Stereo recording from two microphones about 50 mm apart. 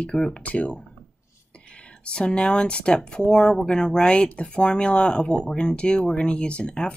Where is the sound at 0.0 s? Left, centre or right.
Left.